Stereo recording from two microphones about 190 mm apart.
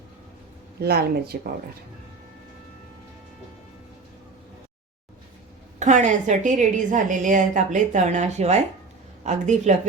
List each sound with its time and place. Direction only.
0.8 s speech: 55° right (ahead or behind)
5.8 s a woman's voice: 40° right (ahead or behind)